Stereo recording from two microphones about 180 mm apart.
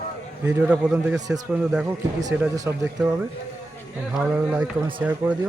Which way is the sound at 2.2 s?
20° right (ahead or behind).